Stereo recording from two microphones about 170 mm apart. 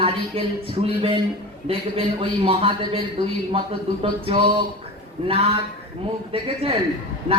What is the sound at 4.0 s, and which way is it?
Speech, 35° right (ahead or behind).